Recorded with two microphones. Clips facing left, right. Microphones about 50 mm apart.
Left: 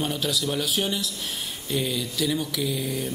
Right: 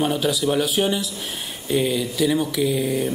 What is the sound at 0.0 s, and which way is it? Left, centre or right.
Speech, centre.